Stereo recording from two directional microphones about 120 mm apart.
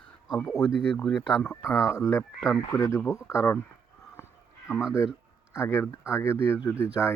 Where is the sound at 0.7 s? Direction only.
Centre (ahead or behind).